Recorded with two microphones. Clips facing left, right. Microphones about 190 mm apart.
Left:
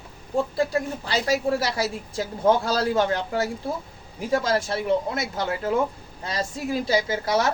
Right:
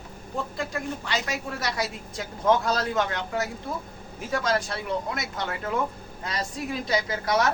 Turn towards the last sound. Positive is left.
turn(degrees=30)  # may be behind; listen again after turning